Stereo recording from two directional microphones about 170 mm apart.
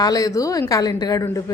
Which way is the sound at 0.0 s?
20° left (ahead or behind).